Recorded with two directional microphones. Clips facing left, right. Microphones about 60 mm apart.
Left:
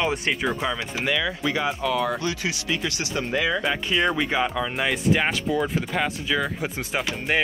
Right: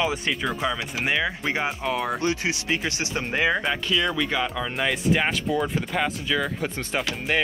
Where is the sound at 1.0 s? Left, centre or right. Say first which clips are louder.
Even; right.